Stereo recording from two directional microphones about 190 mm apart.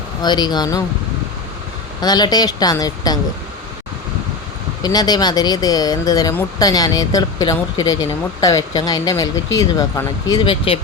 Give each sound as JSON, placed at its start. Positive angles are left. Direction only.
{"t": 0.2, "sound": "speech", "side_deg": 20}
{"t": 2.0, "sound": "speech", "side_deg": 20}
{"t": 4.8, "sound": "speech", "side_deg": 20}